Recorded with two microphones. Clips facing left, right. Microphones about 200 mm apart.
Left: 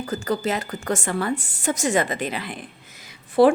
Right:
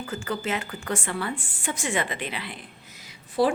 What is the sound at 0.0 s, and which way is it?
A woman's voice, 40° left (ahead or behind).